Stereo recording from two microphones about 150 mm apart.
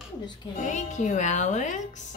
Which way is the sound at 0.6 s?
50° left (ahead or behind).